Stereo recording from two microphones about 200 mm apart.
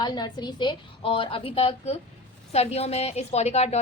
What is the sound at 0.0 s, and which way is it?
A woman's voice, 20° left (ahead or behind).